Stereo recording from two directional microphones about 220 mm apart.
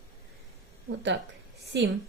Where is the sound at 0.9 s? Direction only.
55° right (ahead or behind).